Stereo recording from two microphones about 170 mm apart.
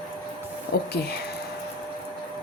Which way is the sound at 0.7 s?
65° left (ahead or behind).